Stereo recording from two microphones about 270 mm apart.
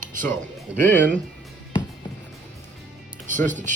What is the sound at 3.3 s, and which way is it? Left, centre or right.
Speech, right.